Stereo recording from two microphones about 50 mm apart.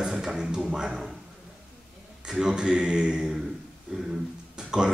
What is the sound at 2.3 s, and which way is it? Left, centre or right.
Speech, centre.